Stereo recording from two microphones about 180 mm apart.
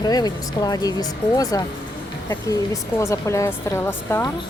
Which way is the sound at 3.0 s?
15° left (ahead or behind).